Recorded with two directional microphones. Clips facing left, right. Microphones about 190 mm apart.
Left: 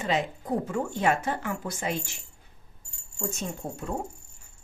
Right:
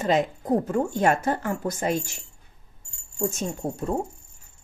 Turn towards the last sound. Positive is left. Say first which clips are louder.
# right 6 dB
turn(degrees=-40)  # may be behind; listen again after turning